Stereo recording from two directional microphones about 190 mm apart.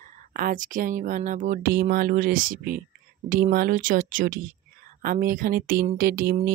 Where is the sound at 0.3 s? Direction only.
45° right (ahead or behind).